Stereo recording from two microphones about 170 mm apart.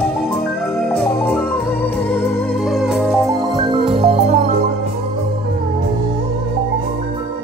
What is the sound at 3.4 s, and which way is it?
Music, 25° right (ahead or behind).